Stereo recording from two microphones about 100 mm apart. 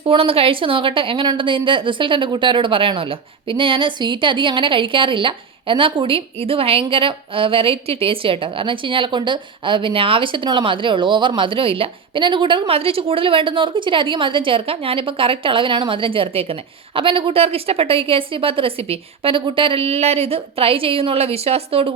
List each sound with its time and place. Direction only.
0.0 s a woman's voice: 65° right (ahead or behind)